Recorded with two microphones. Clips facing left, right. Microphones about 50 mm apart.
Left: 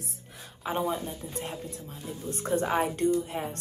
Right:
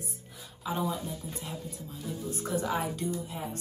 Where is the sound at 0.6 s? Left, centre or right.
Left.